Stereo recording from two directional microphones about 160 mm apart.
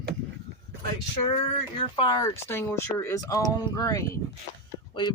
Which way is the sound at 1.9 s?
30° left (ahead or behind).